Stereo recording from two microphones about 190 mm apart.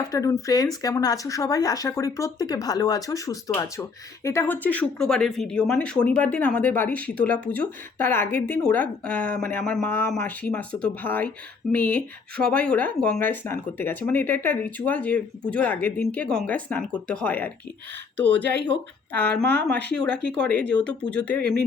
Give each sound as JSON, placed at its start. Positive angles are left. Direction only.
{"t": 0.1, "sound": "speech", "side_deg": 15}